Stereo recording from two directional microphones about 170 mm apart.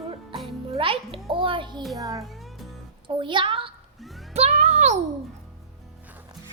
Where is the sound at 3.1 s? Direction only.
30° right (ahead or behind).